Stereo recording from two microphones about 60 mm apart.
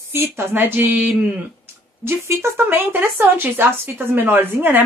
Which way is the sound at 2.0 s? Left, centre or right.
Right.